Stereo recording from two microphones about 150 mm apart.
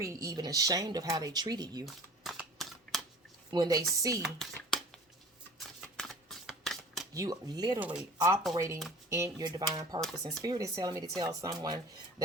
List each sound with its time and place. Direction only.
0.0 s speech: 20° right (ahead or behind)
2.2 s a sound: centre (ahead or behind)
3.5 s speech: 25° right (ahead or behind)
4.4 s a sound: 5° left (ahead or behind)
5.5 s shuffling cards: centre (ahead or behind)
7.1 s speech: 25° right (ahead or behind)
7.8 s speech: 10° right (ahead or behind)
8.5 s speech: 20° right (ahead or behind)